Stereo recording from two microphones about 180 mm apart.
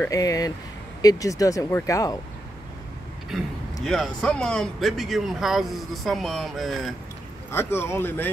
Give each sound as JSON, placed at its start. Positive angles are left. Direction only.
{"t": 0.0, "sound": "speech", "side_deg": 20}
{"t": 3.8, "sound": "speech", "side_deg": 0}
{"t": 7.5, "sound": "speech", "side_deg": 15}